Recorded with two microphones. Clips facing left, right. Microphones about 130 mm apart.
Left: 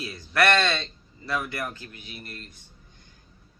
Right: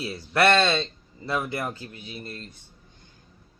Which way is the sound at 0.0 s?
30° right (ahead or behind).